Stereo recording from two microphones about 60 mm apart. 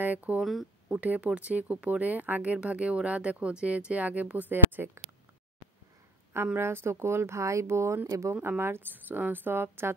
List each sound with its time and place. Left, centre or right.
0.0 s speech: right
0.4 s speech: centre
0.9 s speech: right
6.3 s speech: right
8.4 s a woman's voice: right